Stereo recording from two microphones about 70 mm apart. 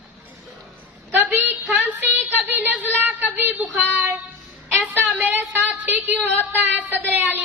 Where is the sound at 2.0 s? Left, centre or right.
Right.